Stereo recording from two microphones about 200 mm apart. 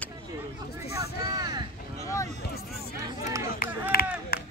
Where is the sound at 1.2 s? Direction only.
20° right (ahead or behind).